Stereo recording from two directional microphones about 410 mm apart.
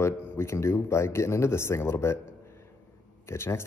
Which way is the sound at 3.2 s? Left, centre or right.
Centre.